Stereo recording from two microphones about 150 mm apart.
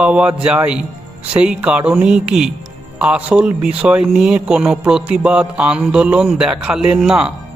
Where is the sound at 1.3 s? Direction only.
5° right (ahead or behind).